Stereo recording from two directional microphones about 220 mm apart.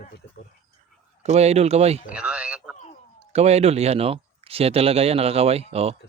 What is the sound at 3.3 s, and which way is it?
Speech, 30° right (ahead or behind).